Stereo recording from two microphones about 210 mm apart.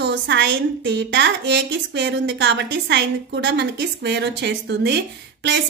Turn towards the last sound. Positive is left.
turn(degrees=-55)  # may be behind; listen again after turning